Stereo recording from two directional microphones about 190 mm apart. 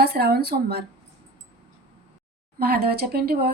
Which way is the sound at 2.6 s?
55° right (ahead or behind).